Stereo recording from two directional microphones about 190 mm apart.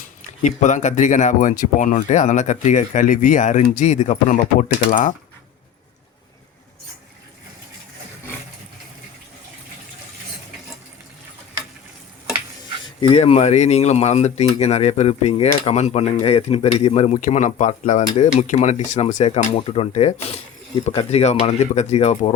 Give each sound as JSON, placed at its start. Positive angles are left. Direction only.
{"t": 0.2, "sound": "speech", "side_deg": 40}
{"t": 13.0, "sound": "speech", "side_deg": 30}